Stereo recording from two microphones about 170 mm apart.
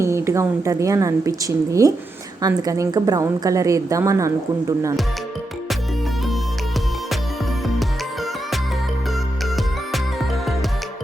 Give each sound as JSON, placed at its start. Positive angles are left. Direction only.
{"t": 0.0, "sound": "a woman's voice", "side_deg": -15}
{"t": 9.6, "sound": "music", "side_deg": 0}